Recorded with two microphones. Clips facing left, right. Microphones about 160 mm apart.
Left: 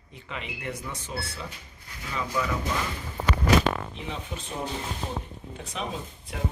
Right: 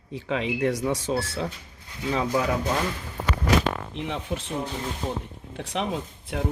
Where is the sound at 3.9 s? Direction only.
70° right (ahead or behind).